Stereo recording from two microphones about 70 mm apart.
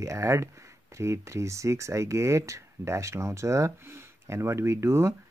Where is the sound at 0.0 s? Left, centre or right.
Right.